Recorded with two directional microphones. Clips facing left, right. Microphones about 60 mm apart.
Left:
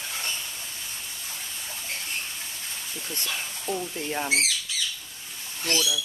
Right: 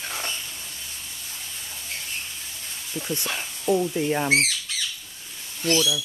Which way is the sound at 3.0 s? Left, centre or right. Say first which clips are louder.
Right 5 dB; centre.